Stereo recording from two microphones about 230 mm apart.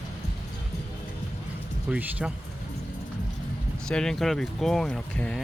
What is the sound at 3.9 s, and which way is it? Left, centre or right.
Speech, centre.